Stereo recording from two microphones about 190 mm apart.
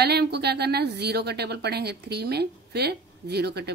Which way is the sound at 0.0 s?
60° right (ahead or behind).